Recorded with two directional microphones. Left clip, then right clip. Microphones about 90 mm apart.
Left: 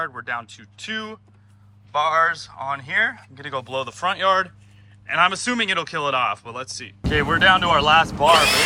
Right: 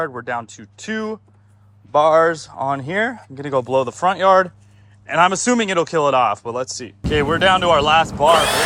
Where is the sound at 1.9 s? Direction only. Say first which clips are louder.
Right 5 dB; 90° right; by 4.0 s 60° right (ahead or behind).